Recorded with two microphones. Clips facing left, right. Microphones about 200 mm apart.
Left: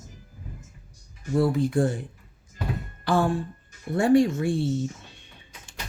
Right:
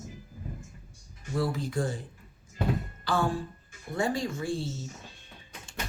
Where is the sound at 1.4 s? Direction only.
60° left (ahead or behind).